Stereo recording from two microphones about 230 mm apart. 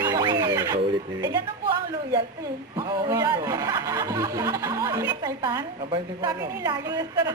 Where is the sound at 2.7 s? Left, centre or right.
Centre.